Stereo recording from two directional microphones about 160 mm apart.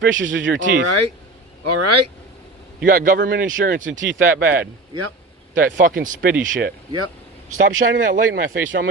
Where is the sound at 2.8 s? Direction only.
60° right (ahead or behind).